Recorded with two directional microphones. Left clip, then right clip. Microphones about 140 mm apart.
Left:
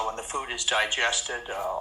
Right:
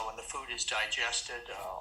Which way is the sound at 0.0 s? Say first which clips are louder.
Left 9 dB; 30° left (ahead or behind).